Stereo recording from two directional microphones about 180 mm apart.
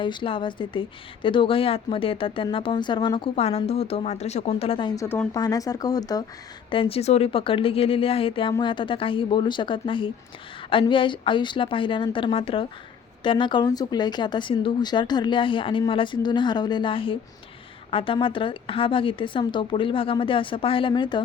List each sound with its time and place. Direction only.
0.0 s speech: 25° left (ahead or behind)
5.0 s speech: 10° left (ahead or behind)
5.3 s a woman's voice: 20° left (ahead or behind)